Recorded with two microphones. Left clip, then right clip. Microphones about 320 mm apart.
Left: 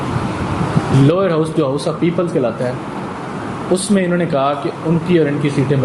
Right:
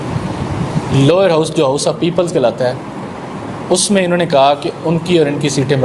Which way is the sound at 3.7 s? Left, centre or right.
Right.